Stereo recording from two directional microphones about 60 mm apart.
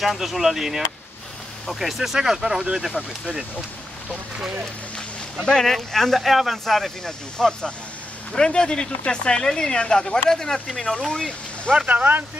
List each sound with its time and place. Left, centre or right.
0.0 s speech: centre
5.4 s speech: centre
11.7 s speech: right